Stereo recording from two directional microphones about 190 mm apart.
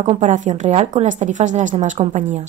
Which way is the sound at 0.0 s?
40° right (ahead or behind).